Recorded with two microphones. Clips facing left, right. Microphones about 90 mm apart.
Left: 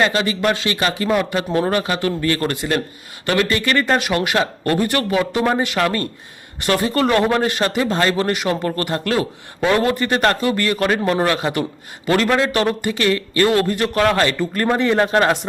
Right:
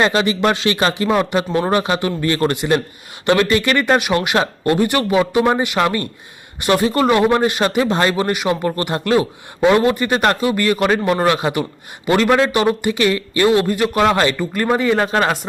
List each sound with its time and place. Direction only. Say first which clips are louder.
0.0 s speech: right 2 dB; 20° right (ahead or behind)
14.3 s speech: right 1 dB; 5° right (ahead or behind)